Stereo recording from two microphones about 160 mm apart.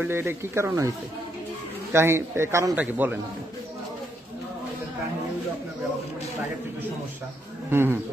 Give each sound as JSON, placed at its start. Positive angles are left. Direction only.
{"t": 0.0, "sound": "a man's voice", "side_deg": -15}
{"t": 7.7, "sound": "a man's voice", "side_deg": -15}